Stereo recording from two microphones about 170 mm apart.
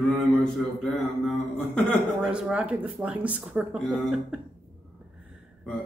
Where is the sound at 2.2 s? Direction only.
5° right (ahead or behind).